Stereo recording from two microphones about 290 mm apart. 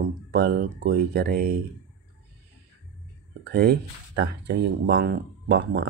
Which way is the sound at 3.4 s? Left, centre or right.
Right.